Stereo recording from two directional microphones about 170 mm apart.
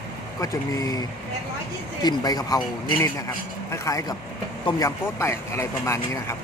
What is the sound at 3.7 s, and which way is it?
Speech, 20° left (ahead or behind).